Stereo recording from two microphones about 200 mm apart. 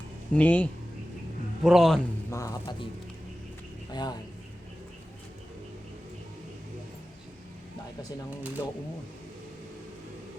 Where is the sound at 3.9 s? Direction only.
20° left (ahead or behind).